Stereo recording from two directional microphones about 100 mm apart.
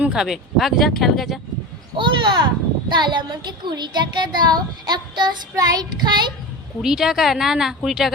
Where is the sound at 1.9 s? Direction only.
50° right (ahead or behind).